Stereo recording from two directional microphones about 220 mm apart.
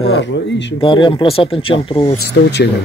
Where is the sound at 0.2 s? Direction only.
55° left (ahead or behind).